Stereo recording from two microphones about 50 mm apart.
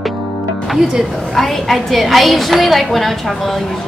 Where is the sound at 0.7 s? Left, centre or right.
Centre.